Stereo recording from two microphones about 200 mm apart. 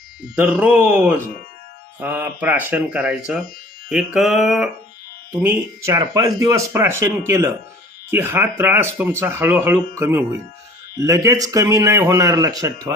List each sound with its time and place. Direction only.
0.3 s speech: 5° right (ahead or behind)
3.8 s music: centre (ahead or behind)
5.4 s speech: 15° right (ahead or behind)